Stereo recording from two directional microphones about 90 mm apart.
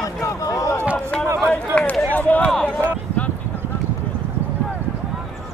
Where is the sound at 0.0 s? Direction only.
35° left (ahead or behind).